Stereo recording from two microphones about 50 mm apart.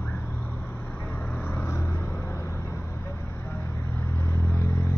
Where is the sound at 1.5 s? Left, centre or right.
Left.